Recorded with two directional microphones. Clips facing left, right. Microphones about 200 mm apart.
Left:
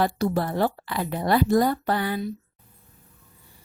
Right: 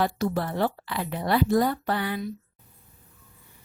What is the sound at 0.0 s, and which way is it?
Speech, 40° left (ahead or behind).